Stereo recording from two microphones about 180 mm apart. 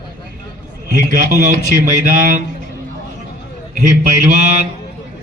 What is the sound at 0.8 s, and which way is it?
A man's voice, 50° right (ahead or behind).